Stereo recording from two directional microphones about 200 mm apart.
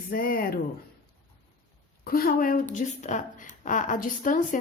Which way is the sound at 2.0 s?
45° left (ahead or behind).